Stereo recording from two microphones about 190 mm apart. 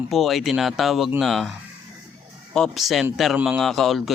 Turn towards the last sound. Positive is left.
turn(degrees=0)  # may be behind; listen again after turning